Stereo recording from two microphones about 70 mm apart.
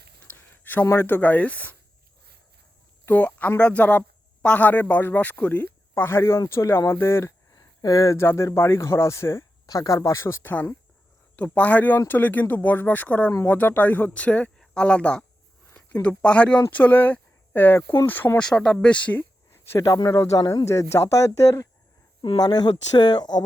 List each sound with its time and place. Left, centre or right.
0.2 s a sound: left
0.9 s speech: left
3.1 s speech: left
5.9 s speech: left
7.5 s a sound: left
8.2 s speech: left
9.6 s speech: left
10.5 s speech: left
18.3 s speech: centre
19.5 s a sound: left
19.8 s speech: left
20.1 s speech: left
22.2 s speech: left